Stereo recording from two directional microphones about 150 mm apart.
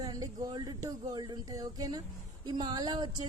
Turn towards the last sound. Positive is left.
turn(degrees=-30)  # may be behind; listen again after turning